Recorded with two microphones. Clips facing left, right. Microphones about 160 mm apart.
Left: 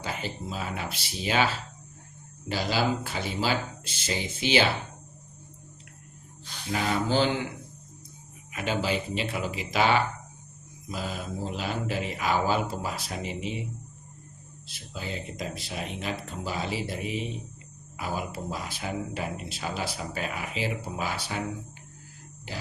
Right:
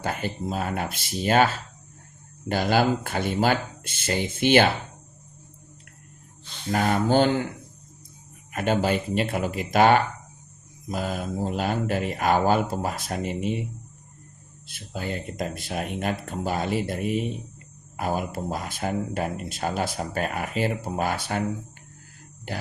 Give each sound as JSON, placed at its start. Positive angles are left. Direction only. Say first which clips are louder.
{"t": 0.0, "sound": "speech", "louder": "right 5 dB", "side_deg": -50}
{"t": 6.7, "sound": "speech", "louder": "right 5 dB", "side_deg": -50}
{"t": 8.5, "sound": "speech", "louder": "right 5 dB", "side_deg": -50}
{"t": 14.7, "sound": "speech", "louder": "right 5 dB", "side_deg": -55}